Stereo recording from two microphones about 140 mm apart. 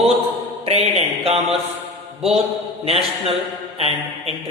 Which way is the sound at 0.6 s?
45° right (ahead or behind).